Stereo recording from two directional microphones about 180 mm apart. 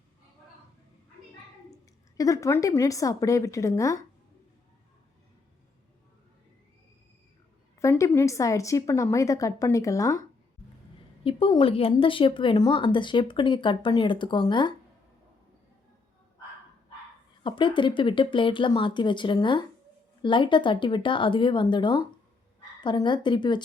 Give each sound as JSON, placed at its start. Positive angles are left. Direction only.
{"t": 2.1, "sound": "a woman's voice", "side_deg": 20}
{"t": 7.8, "sound": "a woman's voice", "side_deg": 15}
{"t": 11.2, "sound": "speech", "side_deg": 30}
{"t": 17.4, "sound": "speech", "side_deg": 25}